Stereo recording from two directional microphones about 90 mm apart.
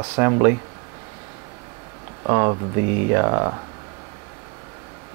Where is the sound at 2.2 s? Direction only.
30° right (ahead or behind).